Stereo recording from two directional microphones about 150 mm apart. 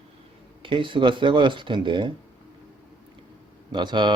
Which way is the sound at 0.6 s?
35° right (ahead or behind).